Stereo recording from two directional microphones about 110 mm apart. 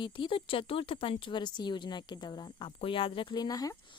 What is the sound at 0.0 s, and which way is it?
Speech, 50° left (ahead or behind).